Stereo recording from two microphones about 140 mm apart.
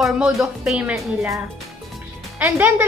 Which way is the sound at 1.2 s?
20° right (ahead or behind).